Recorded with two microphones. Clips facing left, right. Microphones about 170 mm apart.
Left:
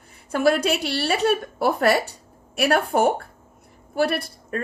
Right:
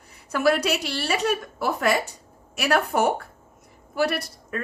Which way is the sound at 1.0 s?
35° left (ahead or behind).